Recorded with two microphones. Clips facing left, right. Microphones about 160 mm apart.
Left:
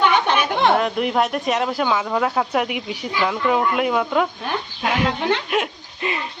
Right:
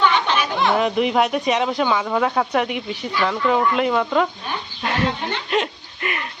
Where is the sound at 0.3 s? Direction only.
55° left (ahead or behind).